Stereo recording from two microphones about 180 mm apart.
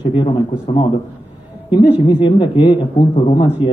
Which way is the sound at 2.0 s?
25° left (ahead or behind).